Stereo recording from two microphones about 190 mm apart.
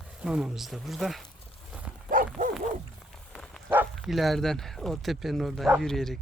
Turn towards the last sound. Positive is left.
turn(degrees=0)  # may be behind; listen again after turning